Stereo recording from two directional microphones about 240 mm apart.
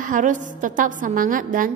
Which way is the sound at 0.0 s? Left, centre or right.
Right.